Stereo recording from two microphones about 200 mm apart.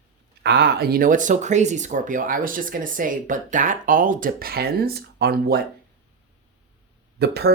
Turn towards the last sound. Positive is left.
turn(degrees=-50)  # may be behind; listen again after turning